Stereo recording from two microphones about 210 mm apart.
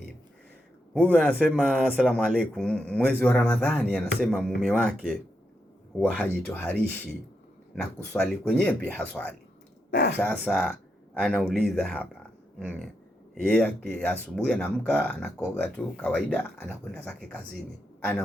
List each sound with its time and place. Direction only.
1.1 s speech: centre (ahead or behind)
9.9 s speech: 50° left (ahead or behind)
10.2 s speech: 5° left (ahead or behind)
13.4 s speech: 5° left (ahead or behind)